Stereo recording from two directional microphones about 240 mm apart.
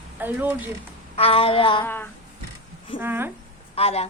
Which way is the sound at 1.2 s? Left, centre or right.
Left.